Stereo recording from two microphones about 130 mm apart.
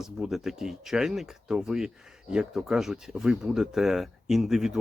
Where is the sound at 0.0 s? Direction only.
5° right (ahead or behind).